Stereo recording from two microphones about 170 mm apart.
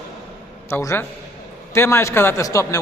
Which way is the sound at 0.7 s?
15° left (ahead or behind).